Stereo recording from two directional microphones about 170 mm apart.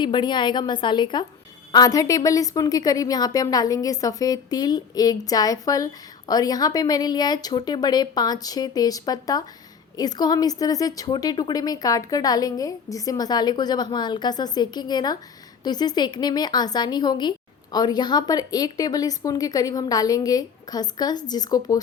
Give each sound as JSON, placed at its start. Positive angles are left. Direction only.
{"t": 0.0, "sound": "a woman's voice", "side_deg": 25}